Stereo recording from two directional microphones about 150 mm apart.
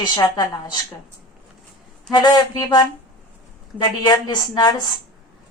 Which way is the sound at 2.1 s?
25° left (ahead or behind).